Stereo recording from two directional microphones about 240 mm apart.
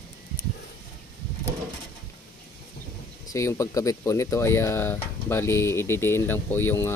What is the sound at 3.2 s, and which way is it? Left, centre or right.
Speech, centre.